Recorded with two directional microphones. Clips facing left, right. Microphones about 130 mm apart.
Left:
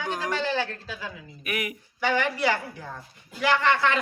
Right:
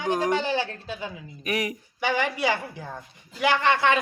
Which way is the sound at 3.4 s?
20° right (ahead or behind).